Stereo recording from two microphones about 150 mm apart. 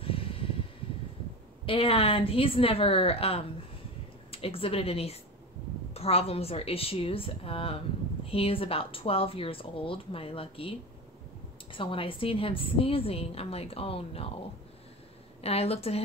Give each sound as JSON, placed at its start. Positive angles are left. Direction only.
{"t": 0.0, "sound": "a sound", "side_deg": 35}
{"t": 1.7, "sound": "a woman's voice", "side_deg": 35}
{"t": 15.4, "sound": "a woman's voice", "side_deg": 40}